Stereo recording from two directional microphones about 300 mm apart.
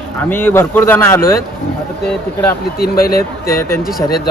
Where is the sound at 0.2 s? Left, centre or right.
Centre.